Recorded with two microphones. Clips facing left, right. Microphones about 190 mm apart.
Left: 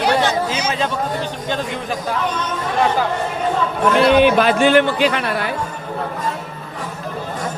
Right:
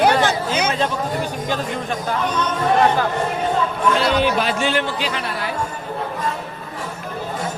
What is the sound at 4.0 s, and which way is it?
Speech, 55° left (ahead or behind).